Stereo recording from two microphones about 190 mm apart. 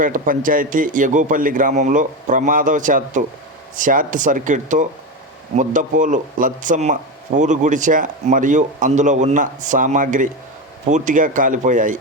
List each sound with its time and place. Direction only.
0.0 s a man's voice: 45° right (ahead or behind)